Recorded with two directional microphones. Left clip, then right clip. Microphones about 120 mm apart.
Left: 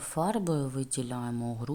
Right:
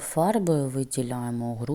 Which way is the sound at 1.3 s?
15° right (ahead or behind).